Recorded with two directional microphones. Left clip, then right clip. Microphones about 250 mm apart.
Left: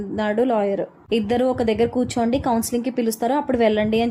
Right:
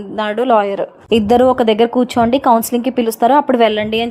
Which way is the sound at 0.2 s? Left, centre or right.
Centre.